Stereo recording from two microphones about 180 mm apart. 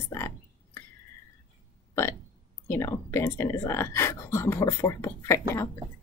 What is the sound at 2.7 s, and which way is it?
A woman's voice, 15° left (ahead or behind).